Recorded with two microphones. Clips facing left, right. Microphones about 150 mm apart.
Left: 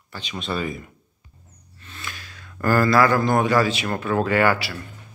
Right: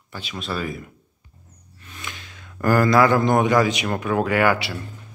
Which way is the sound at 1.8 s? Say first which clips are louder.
Even; 15° right (ahead or behind).